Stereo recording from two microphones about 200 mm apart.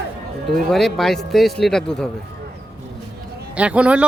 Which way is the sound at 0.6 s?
Centre (ahead or behind).